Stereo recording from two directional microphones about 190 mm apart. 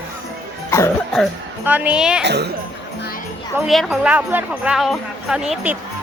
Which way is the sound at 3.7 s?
5° right (ahead or behind).